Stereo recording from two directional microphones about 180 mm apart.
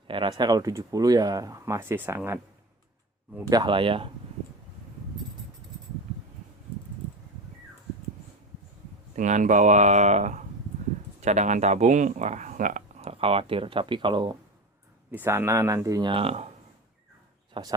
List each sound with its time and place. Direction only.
0.1 s speech: 25° right (ahead or behind)
3.5 s speech: 25° right (ahead or behind)
9.1 s speech: 45° right (ahead or behind); by 14.3 s 25° right (ahead or behind)
15.1 s speech: 10° right (ahead or behind); by 16.5 s 35° right (ahead or behind)
17.5 s speech: 20° right (ahead or behind)